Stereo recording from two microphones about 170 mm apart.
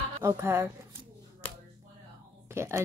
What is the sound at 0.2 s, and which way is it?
Speech, 15° right (ahead or behind).